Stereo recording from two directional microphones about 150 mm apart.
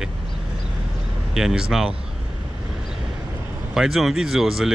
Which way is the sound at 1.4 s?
5° right (ahead or behind).